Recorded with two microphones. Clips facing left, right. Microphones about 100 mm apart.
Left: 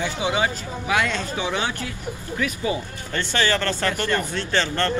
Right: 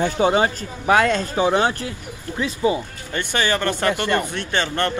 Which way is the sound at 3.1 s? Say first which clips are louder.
Right 1 dB; 15° right (ahead or behind).